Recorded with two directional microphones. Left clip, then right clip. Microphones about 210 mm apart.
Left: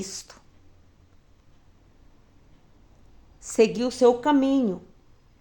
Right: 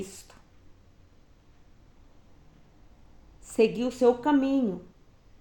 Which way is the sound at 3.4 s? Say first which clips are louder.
Left 3 dB; 40° left (ahead or behind).